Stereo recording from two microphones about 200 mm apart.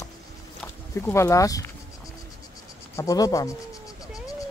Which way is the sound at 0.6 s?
10° left (ahead or behind).